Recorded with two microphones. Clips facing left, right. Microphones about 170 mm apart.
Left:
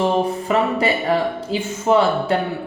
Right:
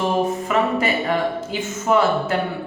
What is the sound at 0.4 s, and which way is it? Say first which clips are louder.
A woman's voice: left 1 dB; 35° left (ahead or behind).